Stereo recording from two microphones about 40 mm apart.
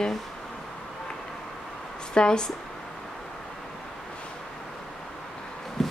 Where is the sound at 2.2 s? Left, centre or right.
Left.